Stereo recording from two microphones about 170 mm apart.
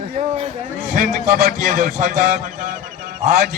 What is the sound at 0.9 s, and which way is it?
A man's voice, 50° right (ahead or behind).